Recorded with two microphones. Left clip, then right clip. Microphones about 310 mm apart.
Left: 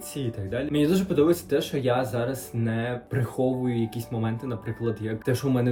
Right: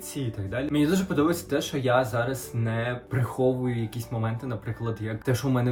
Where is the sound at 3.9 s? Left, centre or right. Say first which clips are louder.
Left 1 dB; centre.